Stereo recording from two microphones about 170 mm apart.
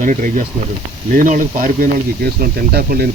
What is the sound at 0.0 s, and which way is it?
Speech, 50° right (ahead or behind).